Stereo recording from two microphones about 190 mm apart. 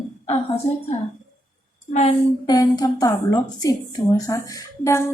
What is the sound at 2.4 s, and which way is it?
A woman's voice, 20° left (ahead or behind).